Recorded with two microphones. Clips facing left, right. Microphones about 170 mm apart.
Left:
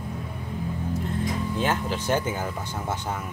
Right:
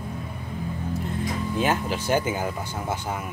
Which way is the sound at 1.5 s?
10° right (ahead or behind).